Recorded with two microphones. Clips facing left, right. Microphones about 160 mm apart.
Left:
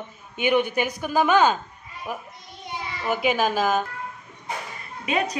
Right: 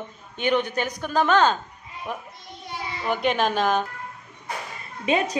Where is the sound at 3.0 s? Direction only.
5° left (ahead or behind).